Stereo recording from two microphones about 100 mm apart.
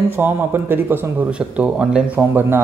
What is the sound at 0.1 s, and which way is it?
A man's voice, 20° right (ahead or behind).